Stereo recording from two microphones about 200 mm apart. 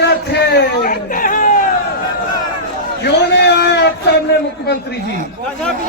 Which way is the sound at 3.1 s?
55° left (ahead or behind).